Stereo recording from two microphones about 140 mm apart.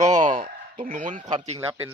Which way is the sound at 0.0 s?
60° right (ahead or behind).